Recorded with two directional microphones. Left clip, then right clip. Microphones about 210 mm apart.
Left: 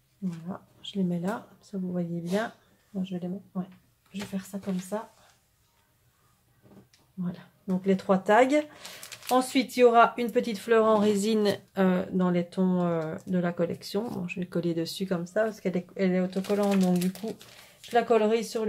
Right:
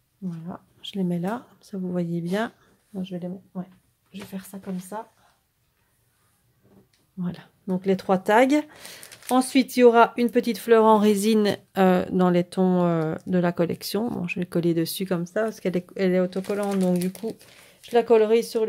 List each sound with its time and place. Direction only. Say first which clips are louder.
0.5 s speech: right 3 dB; 40° right (ahead or behind)
7.2 s speech: right 3 dB; 40° right (ahead or behind)
17.9 s speech: right 5 dB; 45° right (ahead or behind)